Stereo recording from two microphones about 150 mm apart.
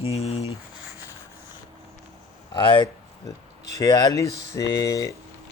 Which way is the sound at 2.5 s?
30° left (ahead or behind).